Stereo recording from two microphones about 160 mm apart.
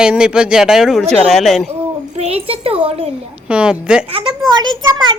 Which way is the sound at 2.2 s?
40° right (ahead or behind).